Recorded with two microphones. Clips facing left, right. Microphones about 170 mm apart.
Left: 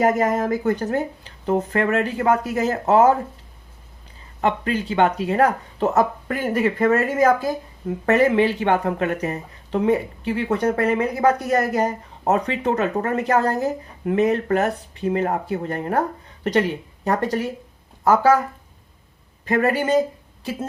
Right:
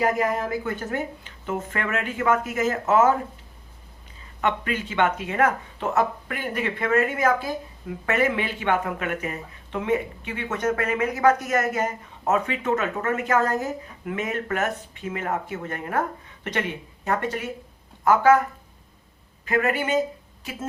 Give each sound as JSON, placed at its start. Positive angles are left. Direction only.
{"t": 0.0, "sound": "speech", "side_deg": 40}
{"t": 4.4, "sound": "speech", "side_deg": 35}
{"t": 19.5, "sound": "speech", "side_deg": 35}